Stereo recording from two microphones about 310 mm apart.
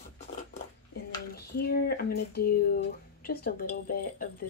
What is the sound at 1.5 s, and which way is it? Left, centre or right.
Speech, left.